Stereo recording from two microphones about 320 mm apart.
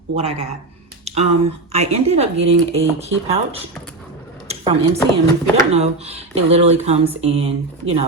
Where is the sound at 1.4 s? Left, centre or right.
Centre.